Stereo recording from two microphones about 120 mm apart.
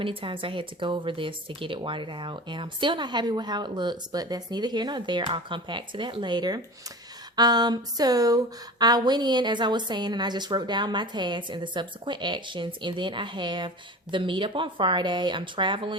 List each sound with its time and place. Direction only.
0.0 s speech: 50° right (ahead or behind)